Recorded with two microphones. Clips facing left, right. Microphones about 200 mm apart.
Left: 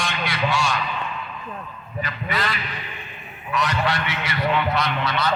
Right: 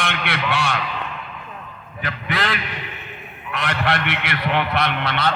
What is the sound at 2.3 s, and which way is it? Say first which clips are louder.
Speech: right 3 dB; 75° right (ahead or behind).